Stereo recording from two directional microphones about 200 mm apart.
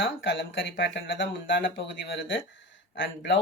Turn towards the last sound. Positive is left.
turn(degrees=65)  # may be behind; listen again after turning